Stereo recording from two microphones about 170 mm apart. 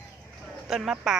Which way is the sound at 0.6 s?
Centre (ahead or behind).